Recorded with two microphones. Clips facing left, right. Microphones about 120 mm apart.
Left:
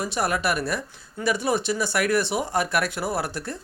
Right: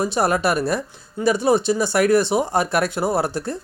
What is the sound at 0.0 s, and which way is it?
Speech, 35° right (ahead or behind).